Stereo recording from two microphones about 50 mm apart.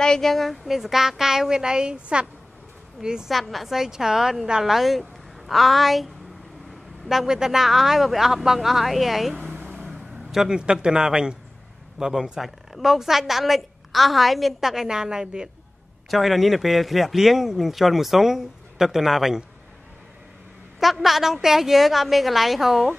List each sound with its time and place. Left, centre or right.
0.0 s a woman's voice: centre
3.3 s a woman's voice: centre
7.1 s a woman's voice: centre
10.3 s a woman's voice: centre
16.1 s a woman's voice: centre
20.8 s a woman's voice: centre